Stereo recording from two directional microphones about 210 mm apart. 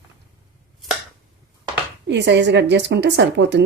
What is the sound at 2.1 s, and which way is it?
A woman's voice, 55° right (ahead or behind).